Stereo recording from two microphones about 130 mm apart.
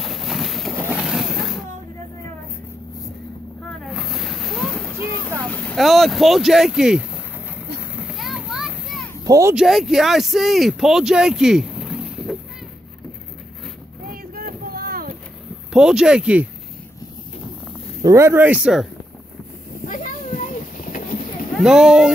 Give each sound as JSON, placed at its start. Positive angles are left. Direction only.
{"t": 0.0, "sound": "a sound", "side_deg": 0}
{"t": 0.8, "sound": "vehicle", "side_deg": -5}
{"t": 3.8, "sound": "boat", "side_deg": 0}
{"t": 5.4, "sound": "vehicle", "side_deg": 15}
{"t": 5.8, "sound": "speech", "side_deg": 0}
{"t": 7.9, "sound": "children playing", "side_deg": -5}
{"t": 9.2, "sound": "speech", "side_deg": -25}
{"t": 9.6, "sound": "speech", "side_deg": -5}
{"t": 15.7, "sound": "speech", "side_deg": -5}
{"t": 18.0, "sound": "speech", "side_deg": -20}
{"t": 19.8, "sound": "a sound", "side_deg": 90}
{"t": 21.5, "sound": "speech", "side_deg": -5}